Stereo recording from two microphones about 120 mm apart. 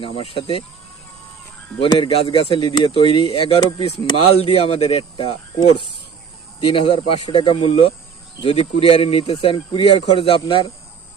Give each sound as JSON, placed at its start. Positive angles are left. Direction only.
{"t": 0.0, "sound": "speech", "side_deg": 50}
{"t": 1.8, "sound": "speech", "side_deg": 50}
{"t": 5.1, "sound": "speech", "side_deg": 45}